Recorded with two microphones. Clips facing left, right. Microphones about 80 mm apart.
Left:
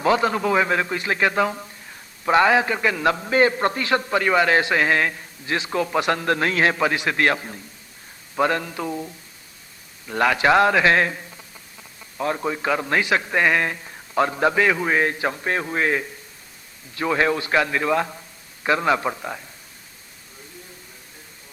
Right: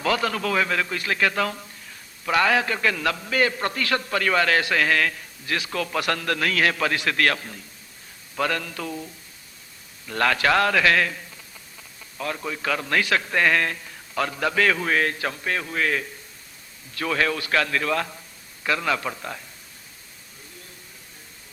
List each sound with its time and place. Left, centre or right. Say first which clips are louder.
0.0 s a man's voice: left 4 dB; left